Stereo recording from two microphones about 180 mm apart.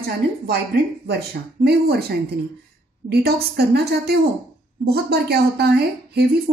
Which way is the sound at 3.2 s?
65° right (ahead or behind).